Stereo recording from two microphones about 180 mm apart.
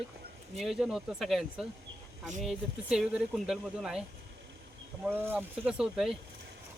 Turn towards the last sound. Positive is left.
turn(degrees=0)  # may be behind; listen again after turning